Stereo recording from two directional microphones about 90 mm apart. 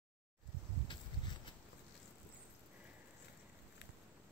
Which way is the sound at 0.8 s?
60° left (ahead or behind).